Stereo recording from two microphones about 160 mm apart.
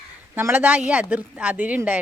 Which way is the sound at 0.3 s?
10° right (ahead or behind).